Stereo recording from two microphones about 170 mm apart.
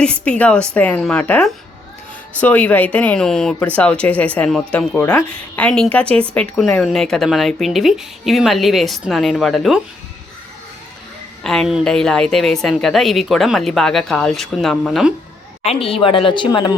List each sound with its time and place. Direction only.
0.0 s a woman's voice: 5° left (ahead or behind)
11.4 s a woman's voice: centre (ahead or behind)
15.6 s speech: 35° left (ahead or behind)